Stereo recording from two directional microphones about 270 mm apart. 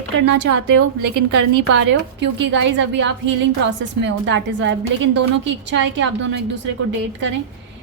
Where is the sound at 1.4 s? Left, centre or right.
Right.